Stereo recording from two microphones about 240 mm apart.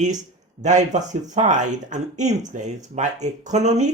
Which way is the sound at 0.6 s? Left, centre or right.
Right.